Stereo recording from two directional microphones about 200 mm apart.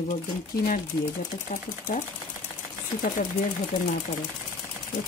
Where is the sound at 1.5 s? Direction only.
40° left (ahead or behind).